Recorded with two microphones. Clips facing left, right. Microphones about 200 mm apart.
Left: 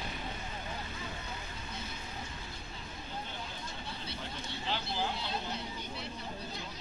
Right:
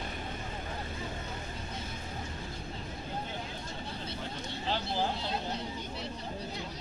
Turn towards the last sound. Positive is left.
turn(degrees=-40)  # may be behind; listen again after turning